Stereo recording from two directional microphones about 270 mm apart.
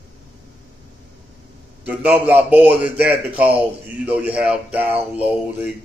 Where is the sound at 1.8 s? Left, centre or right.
Centre.